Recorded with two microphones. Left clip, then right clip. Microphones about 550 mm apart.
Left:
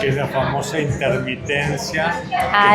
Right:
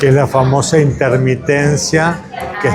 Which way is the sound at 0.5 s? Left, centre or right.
Right.